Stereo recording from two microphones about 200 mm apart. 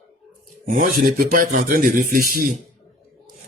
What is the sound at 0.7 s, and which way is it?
A man's voice, 45° right (ahead or behind).